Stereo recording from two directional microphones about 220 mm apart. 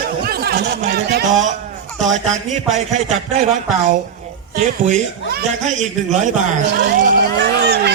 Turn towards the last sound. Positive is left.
turn(degrees=-50)  # may be behind; listen again after turning